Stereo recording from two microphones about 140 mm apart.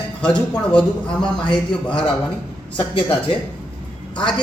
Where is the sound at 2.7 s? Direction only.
35° left (ahead or behind).